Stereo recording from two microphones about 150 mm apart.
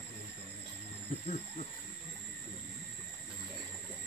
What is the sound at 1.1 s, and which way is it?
Speech, 45° left (ahead or behind).